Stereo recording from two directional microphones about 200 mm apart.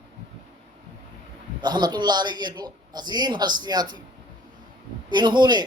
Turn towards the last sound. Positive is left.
turn(degrees=-20)  # may be behind; listen again after turning